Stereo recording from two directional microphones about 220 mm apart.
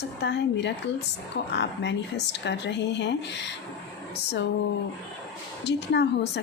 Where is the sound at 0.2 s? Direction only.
50° left (ahead or behind).